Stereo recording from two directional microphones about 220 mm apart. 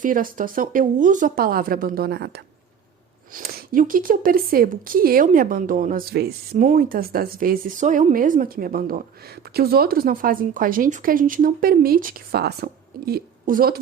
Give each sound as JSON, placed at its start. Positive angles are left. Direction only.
{"t": 0.0, "sound": "a woman's voice", "side_deg": -40}